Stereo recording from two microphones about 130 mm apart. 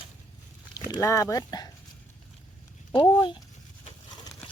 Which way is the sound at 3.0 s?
40° left (ahead or behind).